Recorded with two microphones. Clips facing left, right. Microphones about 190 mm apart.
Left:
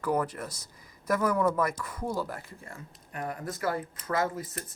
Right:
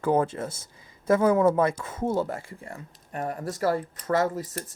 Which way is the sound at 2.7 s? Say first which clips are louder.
Right 5 dB; 40° right (ahead or behind).